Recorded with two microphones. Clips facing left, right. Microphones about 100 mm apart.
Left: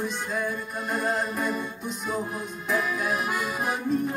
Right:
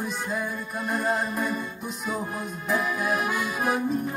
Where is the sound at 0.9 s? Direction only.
Centre (ahead or behind).